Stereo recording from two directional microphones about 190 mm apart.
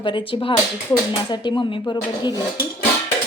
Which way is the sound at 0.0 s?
25° left (ahead or behind).